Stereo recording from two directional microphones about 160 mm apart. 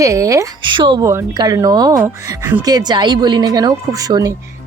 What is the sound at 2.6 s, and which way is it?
Speech, 25° right (ahead or behind).